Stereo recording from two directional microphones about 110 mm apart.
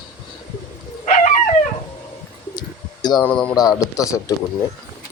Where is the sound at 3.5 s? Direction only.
35° left (ahead or behind).